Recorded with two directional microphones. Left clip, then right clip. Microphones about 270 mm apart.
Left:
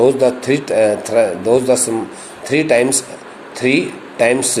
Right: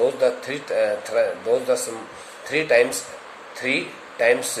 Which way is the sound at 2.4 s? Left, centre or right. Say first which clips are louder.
Left 5 dB; centre.